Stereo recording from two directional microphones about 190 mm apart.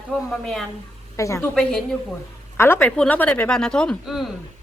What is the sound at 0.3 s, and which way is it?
Speech, centre (ahead or behind).